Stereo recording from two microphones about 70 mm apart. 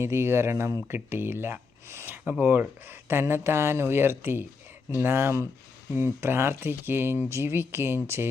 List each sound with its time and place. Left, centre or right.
0.0 s speech: right